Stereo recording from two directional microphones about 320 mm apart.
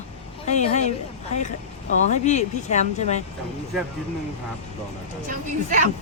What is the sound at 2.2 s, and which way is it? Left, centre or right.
Speech, left.